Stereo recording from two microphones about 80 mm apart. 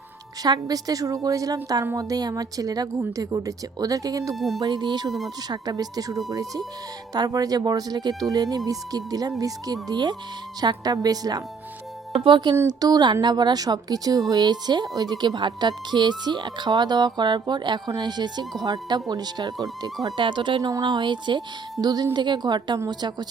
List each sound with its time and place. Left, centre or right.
0.4 s speech: right
4.4 s speech: centre
4.6 s speech: right
9.9 s speech: right
12.1 s speech: right
12.6 s speech: right
20.1 s speech: right
20.6 s speech: right
20.8 s speech: right